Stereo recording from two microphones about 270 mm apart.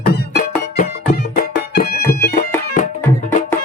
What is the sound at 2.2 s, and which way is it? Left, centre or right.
Bagpipes, left.